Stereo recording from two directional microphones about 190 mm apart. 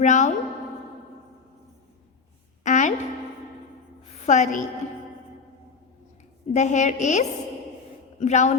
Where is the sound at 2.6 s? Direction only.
40° left (ahead or behind).